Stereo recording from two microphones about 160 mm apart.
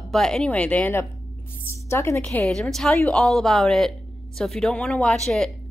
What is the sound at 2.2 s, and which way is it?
A woman's voice, 5° left (ahead or behind).